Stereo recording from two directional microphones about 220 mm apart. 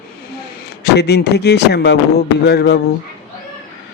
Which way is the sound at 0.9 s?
50° left (ahead or behind).